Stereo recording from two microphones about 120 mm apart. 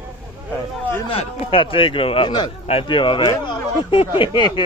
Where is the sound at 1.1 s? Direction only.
50° left (ahead or behind).